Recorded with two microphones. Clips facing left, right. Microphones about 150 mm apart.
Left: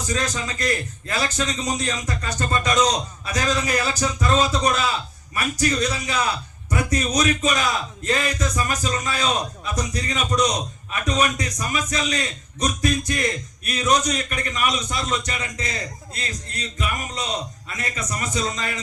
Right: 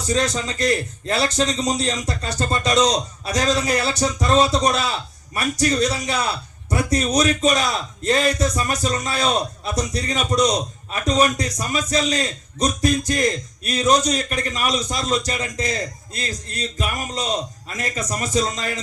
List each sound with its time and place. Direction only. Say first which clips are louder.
0.0 s a man's voice: right 4 dB; 35° right (ahead or behind)